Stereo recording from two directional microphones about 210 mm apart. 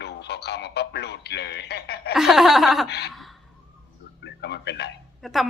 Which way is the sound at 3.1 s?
Centre (ahead or behind).